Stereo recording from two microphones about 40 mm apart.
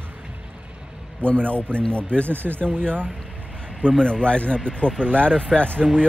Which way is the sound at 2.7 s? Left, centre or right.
Right.